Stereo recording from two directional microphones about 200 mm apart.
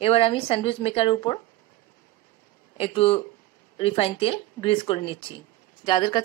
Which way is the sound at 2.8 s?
30° left (ahead or behind).